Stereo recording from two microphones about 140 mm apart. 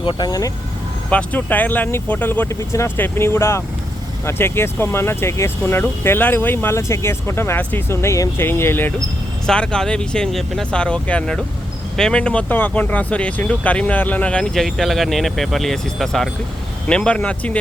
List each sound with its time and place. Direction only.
0.0 s speech: 35° left (ahead or behind)
1.1 s speech: 10° left (ahead or behind)
9.5 s speech: 5° left (ahead or behind)